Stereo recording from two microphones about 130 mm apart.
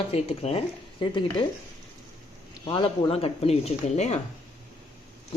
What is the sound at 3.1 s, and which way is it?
Speech, 50° left (ahead or behind).